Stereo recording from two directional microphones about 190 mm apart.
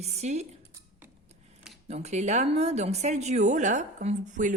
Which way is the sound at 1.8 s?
35° right (ahead or behind).